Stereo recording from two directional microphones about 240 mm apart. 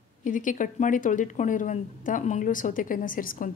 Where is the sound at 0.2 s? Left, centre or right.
Left.